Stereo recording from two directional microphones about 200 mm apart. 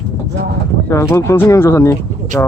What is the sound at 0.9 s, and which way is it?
Speech, 15° left (ahead or behind).